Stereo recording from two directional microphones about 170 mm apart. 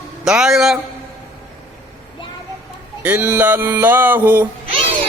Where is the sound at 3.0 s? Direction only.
10° right (ahead or behind).